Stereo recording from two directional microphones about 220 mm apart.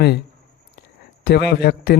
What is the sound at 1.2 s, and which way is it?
Speech, 50° left (ahead or behind).